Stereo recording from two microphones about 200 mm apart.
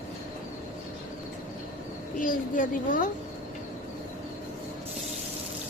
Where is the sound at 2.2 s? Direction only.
40° left (ahead or behind).